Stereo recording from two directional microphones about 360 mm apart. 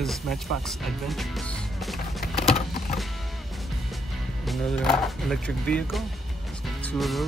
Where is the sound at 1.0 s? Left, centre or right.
Centre.